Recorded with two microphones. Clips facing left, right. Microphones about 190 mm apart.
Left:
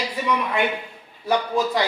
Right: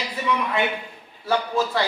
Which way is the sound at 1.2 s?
15° left (ahead or behind).